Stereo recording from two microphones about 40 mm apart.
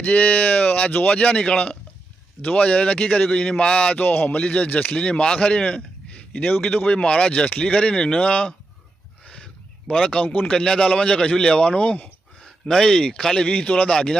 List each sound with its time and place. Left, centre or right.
0.0 s speech: left
4.0 s speech: left
4.4 s speech: left
4.9 s speech: left
6.4 s speech: left
7.0 s speech: left
9.9 s speech: centre
12.4 s a man's voice: centre
13.5 s speech: left
13.9 s speech: centre